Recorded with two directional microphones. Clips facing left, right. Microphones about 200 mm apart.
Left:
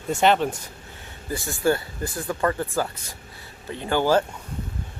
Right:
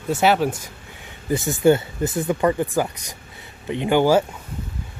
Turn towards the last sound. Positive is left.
turn(degrees=-15)  # may be behind; listen again after turning